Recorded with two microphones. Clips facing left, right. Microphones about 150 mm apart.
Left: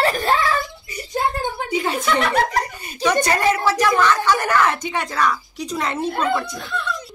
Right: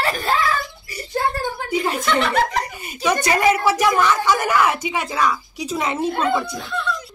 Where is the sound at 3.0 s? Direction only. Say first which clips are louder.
Even; 10° right (ahead or behind).